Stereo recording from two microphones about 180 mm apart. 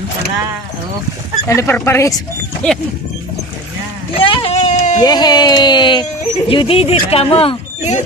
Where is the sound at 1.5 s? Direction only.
15° left (ahead or behind).